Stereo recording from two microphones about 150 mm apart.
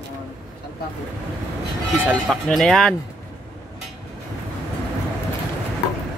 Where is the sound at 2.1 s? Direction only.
5° left (ahead or behind).